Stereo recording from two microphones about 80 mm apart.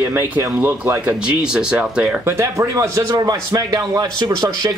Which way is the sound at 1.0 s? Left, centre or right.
Centre.